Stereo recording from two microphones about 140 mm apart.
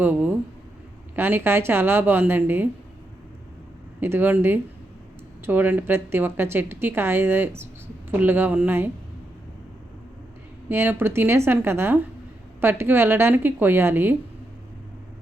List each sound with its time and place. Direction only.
0.0 s speech: 10° right (ahead or behind)
4.0 s speech: 15° right (ahead or behind)
10.7 s speech: 15° right (ahead or behind)